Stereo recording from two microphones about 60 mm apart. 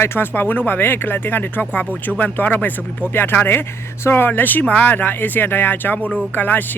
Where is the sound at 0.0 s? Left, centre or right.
Left.